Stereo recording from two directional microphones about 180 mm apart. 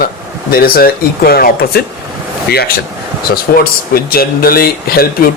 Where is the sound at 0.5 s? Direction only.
55° left (ahead or behind).